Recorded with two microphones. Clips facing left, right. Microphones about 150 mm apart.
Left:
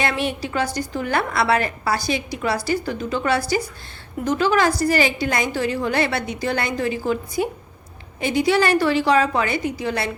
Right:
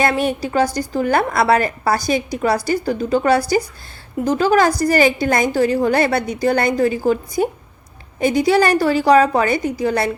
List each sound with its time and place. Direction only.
0.0 s a woman's voice: 45° right (ahead or behind)